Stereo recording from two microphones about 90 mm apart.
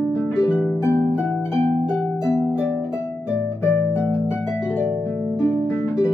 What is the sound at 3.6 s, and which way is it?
Music, 30° left (ahead or behind).